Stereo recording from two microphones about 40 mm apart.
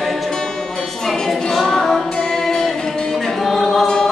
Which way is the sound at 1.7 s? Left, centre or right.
Centre.